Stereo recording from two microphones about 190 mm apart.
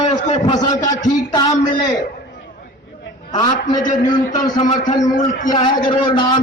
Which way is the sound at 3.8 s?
45° left (ahead or behind).